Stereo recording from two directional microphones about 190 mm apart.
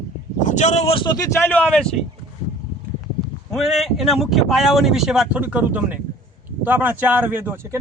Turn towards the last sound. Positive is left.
turn(degrees=-10)  # may be behind; listen again after turning